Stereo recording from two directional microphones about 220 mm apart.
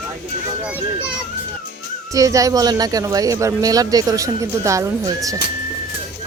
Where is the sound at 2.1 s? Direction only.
15° right (ahead or behind).